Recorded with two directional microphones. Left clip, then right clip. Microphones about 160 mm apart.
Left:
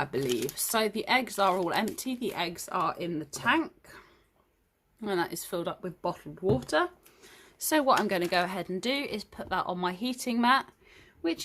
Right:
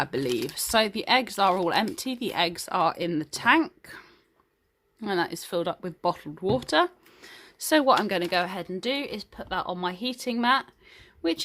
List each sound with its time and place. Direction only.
0.0 s speech: 35° right (ahead or behind)
4.9 s speech: 30° right (ahead or behind); by 11.0 s 10° right (ahead or behind)
11.2 s speech: 25° right (ahead or behind)